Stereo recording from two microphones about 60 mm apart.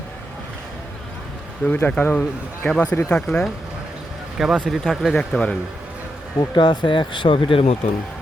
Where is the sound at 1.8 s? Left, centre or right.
Left.